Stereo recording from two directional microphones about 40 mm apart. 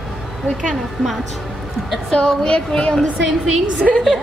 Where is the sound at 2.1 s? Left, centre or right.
Left.